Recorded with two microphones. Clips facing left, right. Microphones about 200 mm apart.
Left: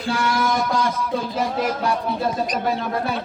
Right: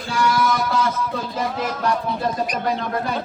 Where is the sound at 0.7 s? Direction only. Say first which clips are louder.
Even; 10° left (ahead or behind).